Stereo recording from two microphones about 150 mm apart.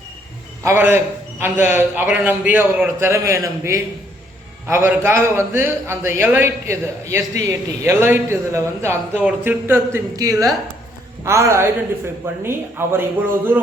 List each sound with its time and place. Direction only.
0.6 s a man's voice: 15° right (ahead or behind)